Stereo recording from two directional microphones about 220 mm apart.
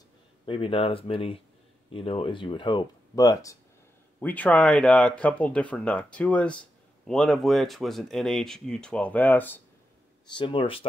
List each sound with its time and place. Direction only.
0.5 s speech: 25° left (ahead or behind); by 9.6 s 10° left (ahead or behind)
10.3 s speech: 25° left (ahead or behind)